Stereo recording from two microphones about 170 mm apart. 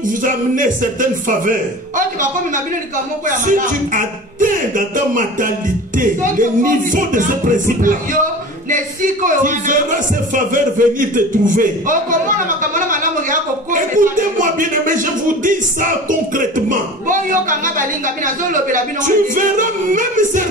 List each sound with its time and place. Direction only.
0.0 s speech: 50° right (ahead or behind)